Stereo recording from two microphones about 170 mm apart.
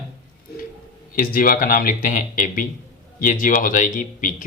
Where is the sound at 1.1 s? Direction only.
55° left (ahead or behind).